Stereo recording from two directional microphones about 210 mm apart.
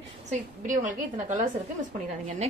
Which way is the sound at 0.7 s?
35° right (ahead or behind).